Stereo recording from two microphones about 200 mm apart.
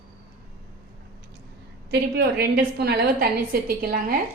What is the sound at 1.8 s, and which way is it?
A woman's voice, 55° right (ahead or behind).